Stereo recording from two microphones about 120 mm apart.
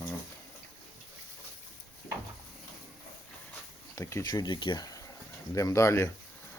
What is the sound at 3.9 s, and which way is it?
Speech, 25° left (ahead or behind).